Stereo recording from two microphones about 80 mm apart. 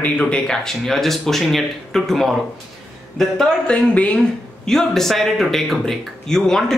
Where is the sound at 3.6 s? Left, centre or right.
Centre.